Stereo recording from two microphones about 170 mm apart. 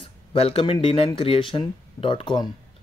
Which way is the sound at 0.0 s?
35° left (ahead or behind).